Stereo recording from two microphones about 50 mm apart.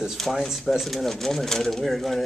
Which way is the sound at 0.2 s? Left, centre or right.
Centre.